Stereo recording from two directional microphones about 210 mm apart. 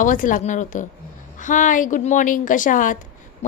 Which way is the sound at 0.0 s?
40° left (ahead or behind).